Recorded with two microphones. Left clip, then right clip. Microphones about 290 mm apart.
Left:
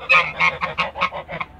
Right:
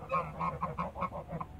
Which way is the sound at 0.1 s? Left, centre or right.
Centre.